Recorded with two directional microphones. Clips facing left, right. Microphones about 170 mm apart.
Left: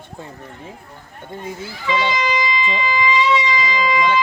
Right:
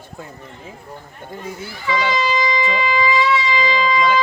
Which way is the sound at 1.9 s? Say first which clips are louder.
Even; 20° left (ahead or behind).